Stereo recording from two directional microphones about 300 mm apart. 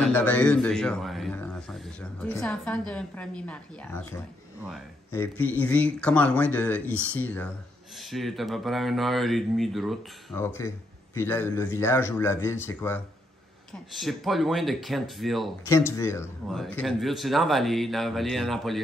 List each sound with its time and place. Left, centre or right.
0.0 s a sound: centre
2.9 s speech: centre
5.1 s a man's voice: centre